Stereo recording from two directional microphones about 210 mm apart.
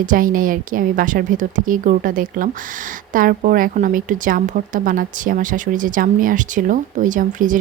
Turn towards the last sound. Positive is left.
turn(degrees=-40)  # may be behind; listen again after turning